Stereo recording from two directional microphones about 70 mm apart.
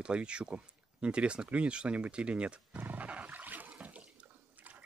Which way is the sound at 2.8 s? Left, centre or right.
Right.